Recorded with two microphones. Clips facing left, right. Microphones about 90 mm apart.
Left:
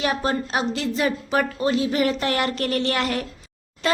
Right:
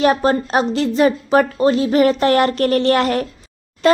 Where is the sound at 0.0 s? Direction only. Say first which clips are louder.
Right 8 dB; 45° right (ahead or behind).